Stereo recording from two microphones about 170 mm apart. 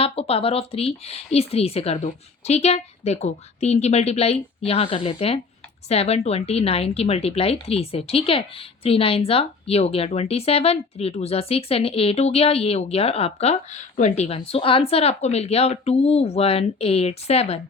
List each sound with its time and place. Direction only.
0.0 s a woman's voice: 35° left (ahead or behind)